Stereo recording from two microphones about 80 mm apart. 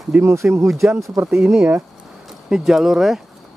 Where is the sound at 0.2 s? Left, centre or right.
Right.